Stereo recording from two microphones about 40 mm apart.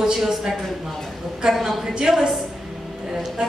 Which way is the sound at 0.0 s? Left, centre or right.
Centre.